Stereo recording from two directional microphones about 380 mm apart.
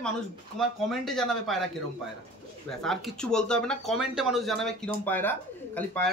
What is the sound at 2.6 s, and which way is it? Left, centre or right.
Speech, centre.